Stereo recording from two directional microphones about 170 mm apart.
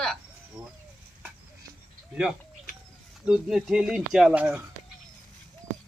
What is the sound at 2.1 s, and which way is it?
Speech, 5° right (ahead or behind).